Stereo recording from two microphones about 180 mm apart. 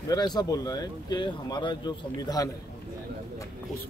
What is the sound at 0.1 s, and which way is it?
Speech, 25° left (ahead or behind).